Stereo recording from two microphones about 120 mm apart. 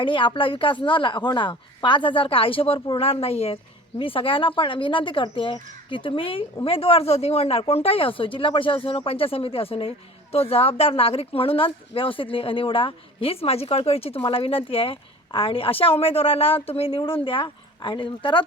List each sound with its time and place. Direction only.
0.0 s a woman's voice: 45° left (ahead or behind)